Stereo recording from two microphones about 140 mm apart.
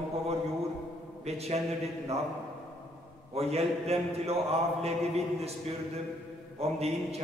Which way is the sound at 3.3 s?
45° right (ahead or behind).